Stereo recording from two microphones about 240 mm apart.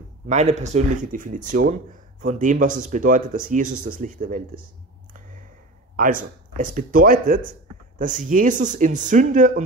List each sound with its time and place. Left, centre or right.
0.3 s speech: right
5.9 s speech: right